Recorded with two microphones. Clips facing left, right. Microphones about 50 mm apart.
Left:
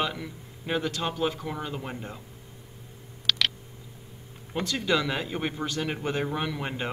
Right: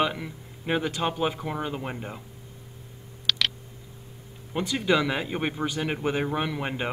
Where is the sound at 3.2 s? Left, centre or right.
Centre.